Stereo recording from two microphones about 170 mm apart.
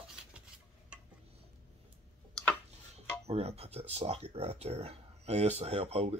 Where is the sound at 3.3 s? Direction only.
35° right (ahead or behind).